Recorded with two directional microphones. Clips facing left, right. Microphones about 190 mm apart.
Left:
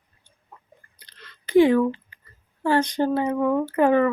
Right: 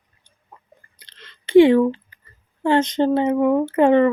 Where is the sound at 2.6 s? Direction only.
20° right (ahead or behind).